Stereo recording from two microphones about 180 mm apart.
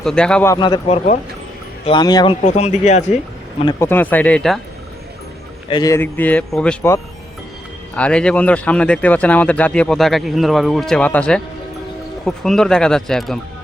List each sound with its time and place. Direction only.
0.0 s speech: 5° left (ahead or behind)
0.5 s speech: 25° left (ahead or behind)
1.8 s speech: 25° left (ahead or behind)
2.4 s speech: 40° left (ahead or behind)
3.8 s speech: 10° left (ahead or behind)
5.6 s speech: 25° left (ahead or behind); by 6.9 s 5° left (ahead or behind)
7.9 s speech: 5° left (ahead or behind)